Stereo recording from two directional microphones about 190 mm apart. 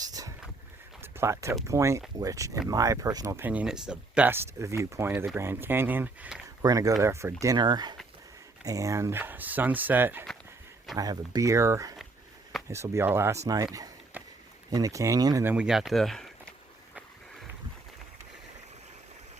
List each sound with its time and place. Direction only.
0.0 s a sound: 20° right (ahead or behind)
1.2 s speech: 15° right (ahead or behind)
6.6 s speech: 15° right (ahead or behind)
13.7 s run: 20° right (ahead or behind)
14.7 s speech: 20° right (ahead or behind)
15.5 s speech: 5° right (ahead or behind)